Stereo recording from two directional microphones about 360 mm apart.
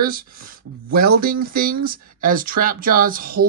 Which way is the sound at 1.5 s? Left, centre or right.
Right.